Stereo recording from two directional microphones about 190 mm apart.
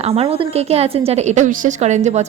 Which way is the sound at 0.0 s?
30° right (ahead or behind).